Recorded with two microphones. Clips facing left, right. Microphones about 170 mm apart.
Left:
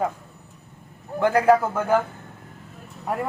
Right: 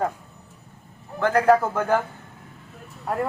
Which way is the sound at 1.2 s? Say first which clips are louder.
Even; 10° left (ahead or behind).